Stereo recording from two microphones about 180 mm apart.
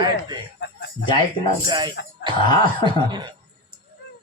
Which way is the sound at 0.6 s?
70° left (ahead or behind).